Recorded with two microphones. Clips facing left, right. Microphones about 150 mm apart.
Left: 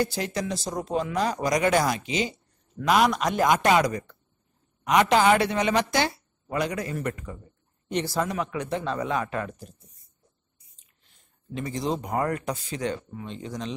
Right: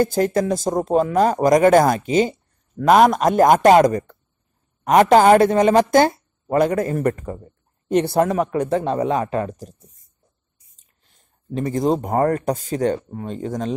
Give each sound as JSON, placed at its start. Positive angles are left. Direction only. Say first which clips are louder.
{"t": 0.0, "sound": "speech", "louder": "right 9 dB", "side_deg": -50}
{"t": 8.9, "sound": "speech", "louder": "right 7 dB", "side_deg": -30}
{"t": 11.5, "sound": "speech", "louder": "right 9 dB", "side_deg": -50}